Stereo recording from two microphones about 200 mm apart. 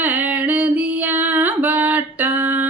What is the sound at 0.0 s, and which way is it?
Female singing, 10° right (ahead or behind).